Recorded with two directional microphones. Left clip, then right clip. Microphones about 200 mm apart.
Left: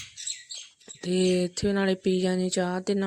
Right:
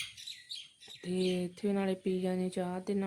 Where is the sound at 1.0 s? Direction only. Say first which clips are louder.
Left 9 dB; 30° left (ahead or behind).